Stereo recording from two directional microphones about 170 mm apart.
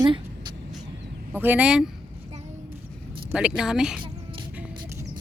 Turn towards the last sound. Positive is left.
turn(degrees=-5)  # may be behind; listen again after turning